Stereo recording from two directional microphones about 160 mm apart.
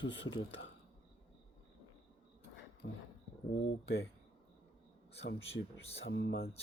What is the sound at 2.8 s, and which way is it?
Speech, 90° left.